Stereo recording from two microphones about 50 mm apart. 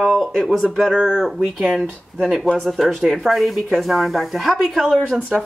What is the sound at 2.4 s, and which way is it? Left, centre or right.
Speech, centre.